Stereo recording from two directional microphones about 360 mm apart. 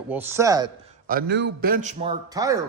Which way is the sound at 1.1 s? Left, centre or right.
Right.